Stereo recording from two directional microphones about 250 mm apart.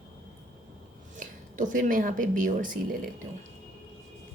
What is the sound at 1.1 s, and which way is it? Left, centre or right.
Speech, right.